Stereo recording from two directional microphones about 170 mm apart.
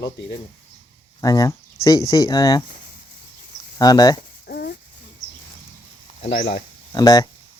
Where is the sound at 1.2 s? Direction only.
20° left (ahead or behind).